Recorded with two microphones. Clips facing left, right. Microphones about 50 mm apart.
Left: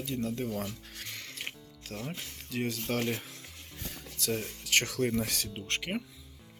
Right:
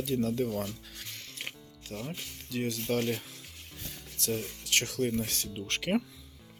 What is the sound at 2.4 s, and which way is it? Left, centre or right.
Speech, left.